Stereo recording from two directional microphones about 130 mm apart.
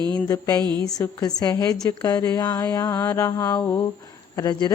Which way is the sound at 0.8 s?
30° left (ahead or behind).